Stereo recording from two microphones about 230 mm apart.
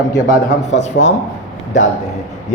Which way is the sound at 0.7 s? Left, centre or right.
Left.